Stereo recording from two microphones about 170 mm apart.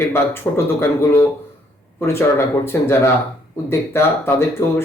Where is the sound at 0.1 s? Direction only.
15° left (ahead or behind).